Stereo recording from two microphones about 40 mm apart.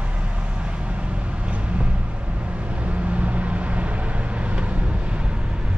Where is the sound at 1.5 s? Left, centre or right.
Right.